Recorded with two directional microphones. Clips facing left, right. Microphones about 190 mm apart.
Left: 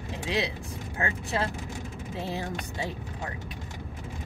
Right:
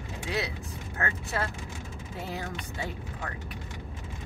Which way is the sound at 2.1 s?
30° left (ahead or behind).